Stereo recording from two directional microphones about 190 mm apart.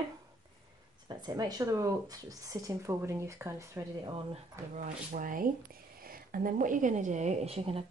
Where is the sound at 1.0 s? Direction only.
20° right (ahead or behind).